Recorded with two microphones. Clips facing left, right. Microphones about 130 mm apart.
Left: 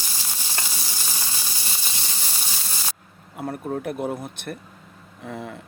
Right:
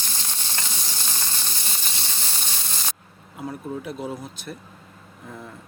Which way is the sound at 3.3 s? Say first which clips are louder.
Left 3 dB; 60° left (ahead or behind).